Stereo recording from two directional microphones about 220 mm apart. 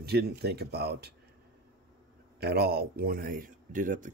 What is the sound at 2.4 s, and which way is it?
Speech, 45° right (ahead or behind).